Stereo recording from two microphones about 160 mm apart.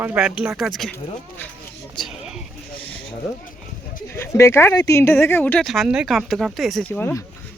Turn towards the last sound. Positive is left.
turn(degrees=15)  # may be behind; listen again after turning